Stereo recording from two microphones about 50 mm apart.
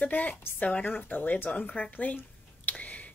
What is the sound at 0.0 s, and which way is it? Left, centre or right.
A woman's voice, left.